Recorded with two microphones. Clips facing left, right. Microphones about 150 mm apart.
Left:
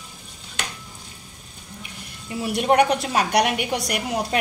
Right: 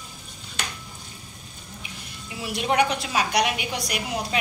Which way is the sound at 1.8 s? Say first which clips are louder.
Left 1 dB; 50° left (ahead or behind).